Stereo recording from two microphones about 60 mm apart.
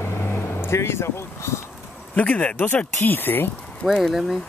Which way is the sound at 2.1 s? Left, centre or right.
Left.